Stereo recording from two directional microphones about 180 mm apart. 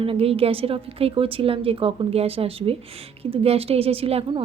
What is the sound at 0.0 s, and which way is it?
Speech, 30° right (ahead or behind).